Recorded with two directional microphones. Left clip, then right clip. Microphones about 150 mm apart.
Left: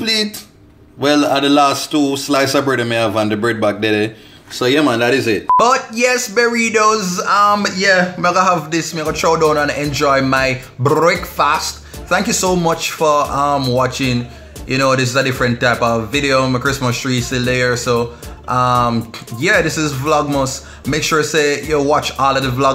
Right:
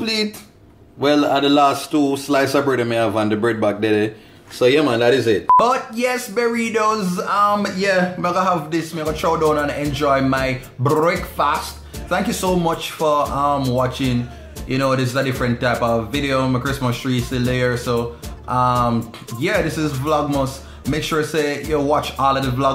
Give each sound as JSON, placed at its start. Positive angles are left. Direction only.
{"t": 0.0, "sound": "a man's voice", "side_deg": 0}
{"t": 5.6, "sound": "speech", "side_deg": 20}